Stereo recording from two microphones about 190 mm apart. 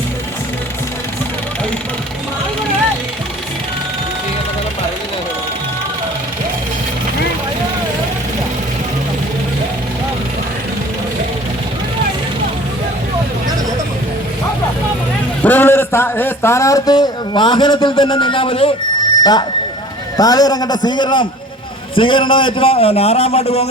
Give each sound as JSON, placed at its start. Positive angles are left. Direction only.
{"t": 15.4, "sound": "speech", "side_deg": 10}